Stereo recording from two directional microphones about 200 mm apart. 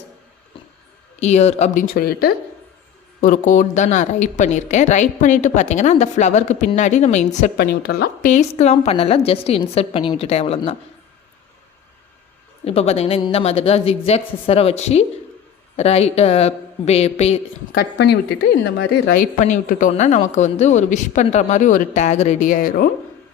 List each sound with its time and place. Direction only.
1.2 s a woman's voice: 35° left (ahead or behind)
7.5 s a woman's voice: 50° left (ahead or behind)
8.3 s a woman's voice: 35° left (ahead or behind)
12.6 s a woman's voice: 30° left (ahead or behind)
17.7 s a woman's voice: 55° left (ahead or behind)
19.2 s a woman's voice: 40° left (ahead or behind)